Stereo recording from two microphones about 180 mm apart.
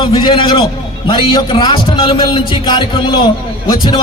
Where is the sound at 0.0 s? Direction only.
25° left (ahead or behind).